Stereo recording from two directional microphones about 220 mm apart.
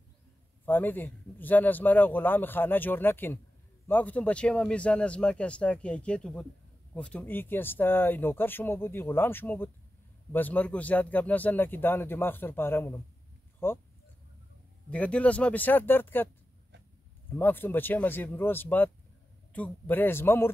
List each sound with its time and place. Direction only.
0.7 s a man's voice: 10° left (ahead or behind)
14.9 s speech: 5° left (ahead or behind)
17.3 s speech: 10° left (ahead or behind)